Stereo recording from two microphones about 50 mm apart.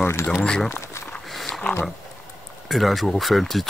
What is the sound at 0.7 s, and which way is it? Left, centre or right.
Speech, left.